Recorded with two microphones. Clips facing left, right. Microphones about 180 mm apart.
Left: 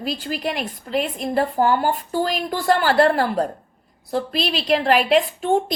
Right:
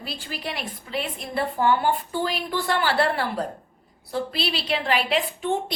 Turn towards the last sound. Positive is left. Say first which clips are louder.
# left 7 dB
turn(degrees=45)  # may be behind; listen again after turning